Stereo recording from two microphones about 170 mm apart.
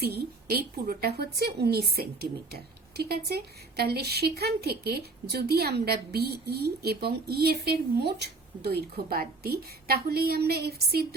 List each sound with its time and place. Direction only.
0.0 s a woman's voice: 70° right (ahead or behind)